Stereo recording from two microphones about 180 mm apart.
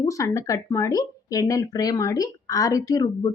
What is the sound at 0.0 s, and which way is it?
Speech, 20° left (ahead or behind).